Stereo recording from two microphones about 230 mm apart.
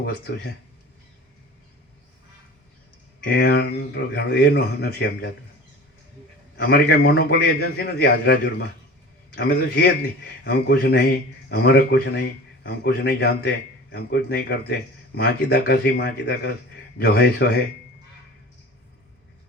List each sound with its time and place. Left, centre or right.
0.0 s speech: left
3.2 s speech: left
6.6 s speech: left